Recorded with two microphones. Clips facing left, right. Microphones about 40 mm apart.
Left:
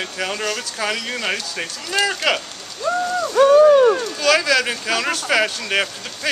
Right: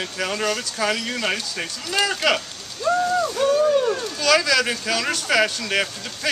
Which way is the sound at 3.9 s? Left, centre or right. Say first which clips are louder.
Left 6 dB; left.